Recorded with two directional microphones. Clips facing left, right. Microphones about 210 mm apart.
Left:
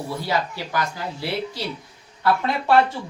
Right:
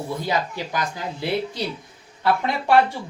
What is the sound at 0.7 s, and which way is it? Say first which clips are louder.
Speech: left 2 dB; 20° right (ahead or behind).